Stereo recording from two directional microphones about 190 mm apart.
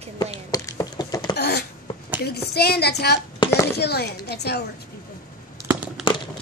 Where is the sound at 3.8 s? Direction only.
60° left (ahead or behind).